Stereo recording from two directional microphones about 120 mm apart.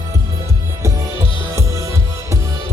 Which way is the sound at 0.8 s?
25° right (ahead or behind).